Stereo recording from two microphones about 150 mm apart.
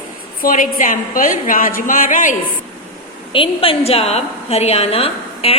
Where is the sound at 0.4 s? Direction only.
60° left (ahead or behind).